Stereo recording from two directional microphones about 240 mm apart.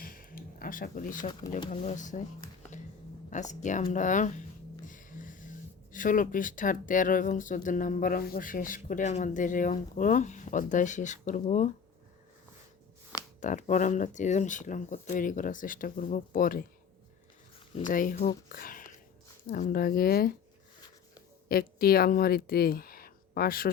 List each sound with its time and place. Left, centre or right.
0.0 s a sound: left
1.7 s speech: left
3.2 s speech: left
4.9 s a sound: left
5.9 s speech: left
13.4 s speech: left
17.7 s speech: left
18.4 s a sound: left
19.5 s speech: left
21.5 s speech: left